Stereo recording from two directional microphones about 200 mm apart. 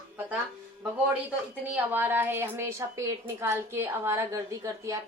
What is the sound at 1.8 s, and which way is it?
A woman's voice, 10° right (ahead or behind).